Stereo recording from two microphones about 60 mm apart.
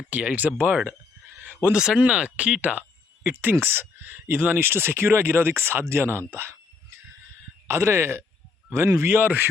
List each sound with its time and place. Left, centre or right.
0.1 s speech: right
1.4 s a sound: right
1.7 s speech: centre
3.5 s speech: right
7.7 s speech: right
9.0 s speech: right